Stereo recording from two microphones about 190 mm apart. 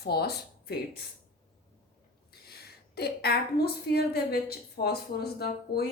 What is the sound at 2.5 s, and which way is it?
A woman's voice, 55° left (ahead or behind).